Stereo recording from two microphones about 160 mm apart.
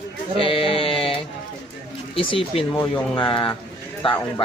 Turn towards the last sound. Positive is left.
turn(degrees=35)  # may be behind; listen again after turning